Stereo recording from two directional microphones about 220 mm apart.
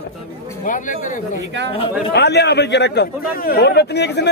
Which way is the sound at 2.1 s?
50° left (ahead or behind).